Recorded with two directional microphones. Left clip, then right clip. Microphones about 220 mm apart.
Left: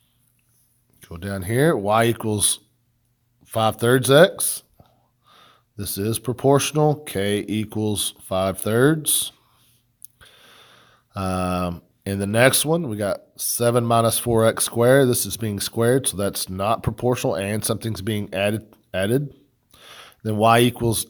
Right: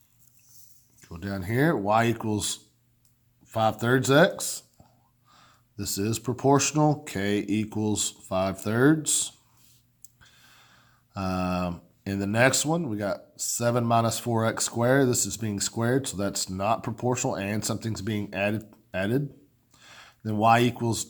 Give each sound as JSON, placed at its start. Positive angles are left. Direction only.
{"t": 0.9, "sound": "speech", "side_deg": 40}